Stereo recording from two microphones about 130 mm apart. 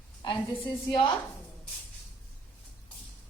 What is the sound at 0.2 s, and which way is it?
Speech, 35° left (ahead or behind).